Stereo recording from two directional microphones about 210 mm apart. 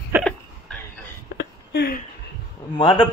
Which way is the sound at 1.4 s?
50° left (ahead or behind).